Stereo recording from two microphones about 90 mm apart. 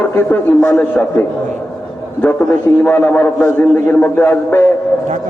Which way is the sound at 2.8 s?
20° left (ahead or behind).